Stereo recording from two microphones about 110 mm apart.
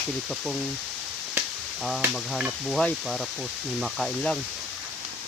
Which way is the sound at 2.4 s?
Centre (ahead or behind).